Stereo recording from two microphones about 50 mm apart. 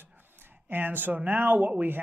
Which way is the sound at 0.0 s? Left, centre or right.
Right.